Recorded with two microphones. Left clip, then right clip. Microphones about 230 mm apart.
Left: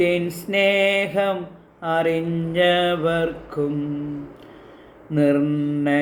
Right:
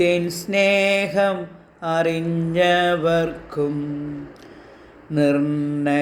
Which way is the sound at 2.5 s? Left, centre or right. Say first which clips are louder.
Right 1 dB; right.